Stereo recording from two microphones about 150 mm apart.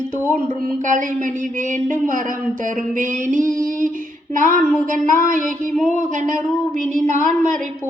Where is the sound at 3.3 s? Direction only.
55° right (ahead or behind).